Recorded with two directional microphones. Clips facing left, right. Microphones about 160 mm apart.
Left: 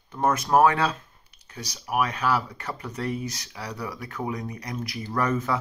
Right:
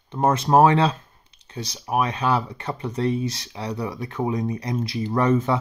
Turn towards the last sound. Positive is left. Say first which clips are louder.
# right 6 dB
turn(degrees=-25)  # may be behind; listen again after turning